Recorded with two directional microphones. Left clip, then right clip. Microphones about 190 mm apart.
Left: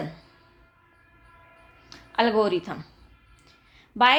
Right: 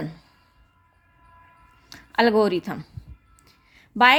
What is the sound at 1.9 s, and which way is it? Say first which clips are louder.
A woman's voice: right 3 dB; 45° right (ahead or behind).